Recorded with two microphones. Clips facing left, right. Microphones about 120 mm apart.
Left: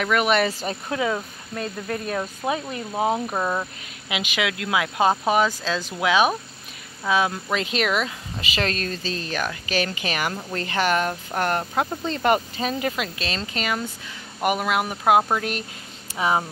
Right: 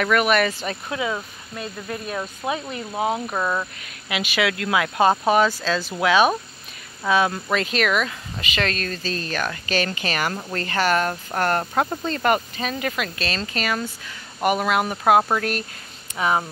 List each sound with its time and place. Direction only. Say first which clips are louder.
0.0 s speech: right 1 dB; 20° left (ahead or behind)
0.6 s speech: left 1 dB; 35° left (ahead or behind)
4.1 s speech: right 3 dB; 15° left (ahead or behind)
7.5 s speech: right 2 dB; 20° left (ahead or behind)
12.0 s speech: even; 20° left (ahead or behind)